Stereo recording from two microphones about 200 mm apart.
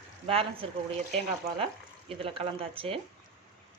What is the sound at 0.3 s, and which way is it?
Speech, 30° right (ahead or behind).